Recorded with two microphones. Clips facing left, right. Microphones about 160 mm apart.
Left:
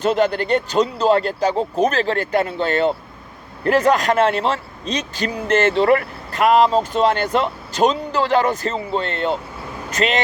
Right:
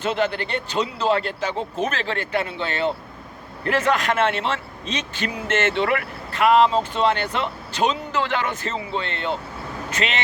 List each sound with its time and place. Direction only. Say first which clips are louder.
0.0 s speech: left 5 dB; 40° left (ahead or behind)